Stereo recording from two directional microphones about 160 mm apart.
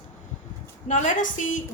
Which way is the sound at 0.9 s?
50° left (ahead or behind).